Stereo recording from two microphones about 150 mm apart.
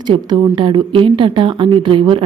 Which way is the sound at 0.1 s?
35° right (ahead or behind).